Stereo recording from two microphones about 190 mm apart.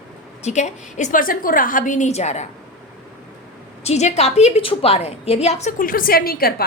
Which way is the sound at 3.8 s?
35° left (ahead or behind).